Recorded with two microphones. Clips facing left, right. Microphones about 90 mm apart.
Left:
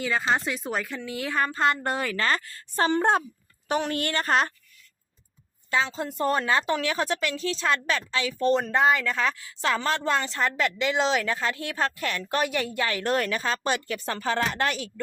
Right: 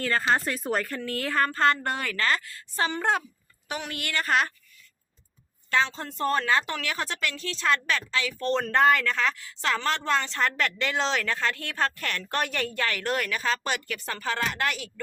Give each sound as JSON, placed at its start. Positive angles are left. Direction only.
{"t": 0.0, "sound": "a woman's voice", "side_deg": 5}
{"t": 5.7, "sound": "a woman's voice", "side_deg": 10}